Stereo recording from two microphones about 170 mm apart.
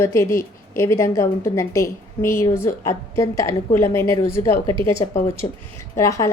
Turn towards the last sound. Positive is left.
turn(degrees=15)  # may be behind; listen again after turning